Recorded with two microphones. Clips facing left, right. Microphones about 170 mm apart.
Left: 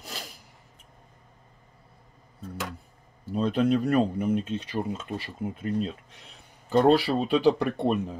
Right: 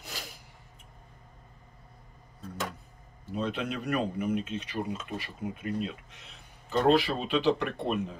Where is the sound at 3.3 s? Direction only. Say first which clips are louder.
Left 9 dB; 35° left (ahead or behind).